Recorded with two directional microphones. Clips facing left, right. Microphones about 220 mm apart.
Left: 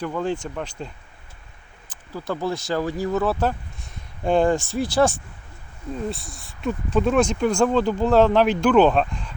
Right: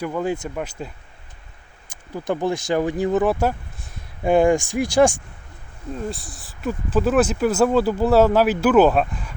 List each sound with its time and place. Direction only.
0.0 s speech: 10° right (ahead or behind)
2.1 s speech: 20° right (ahead or behind)
6.1 s speech: centre (ahead or behind)